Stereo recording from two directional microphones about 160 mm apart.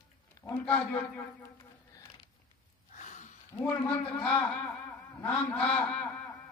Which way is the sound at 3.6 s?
10° left (ahead or behind).